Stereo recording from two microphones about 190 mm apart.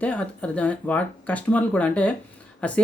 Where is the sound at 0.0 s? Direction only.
5° left (ahead or behind).